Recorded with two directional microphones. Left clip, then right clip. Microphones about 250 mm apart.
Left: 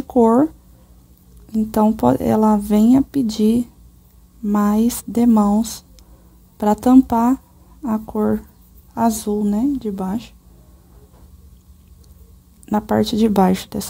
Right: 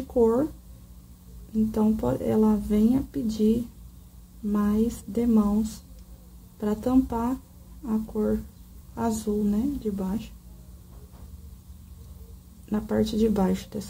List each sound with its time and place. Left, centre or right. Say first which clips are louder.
0.1 s speech: left 7 dB; left
1.7 s speech: left 11 dB; left
12.6 s speech: left 9 dB; left